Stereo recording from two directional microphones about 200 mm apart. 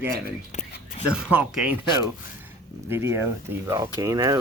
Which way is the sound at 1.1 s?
5° right (ahead or behind).